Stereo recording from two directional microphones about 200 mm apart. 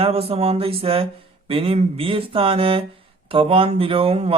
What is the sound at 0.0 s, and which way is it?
Speech, 30° right (ahead or behind).